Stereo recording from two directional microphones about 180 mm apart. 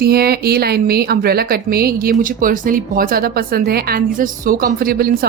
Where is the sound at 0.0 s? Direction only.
60° right (ahead or behind).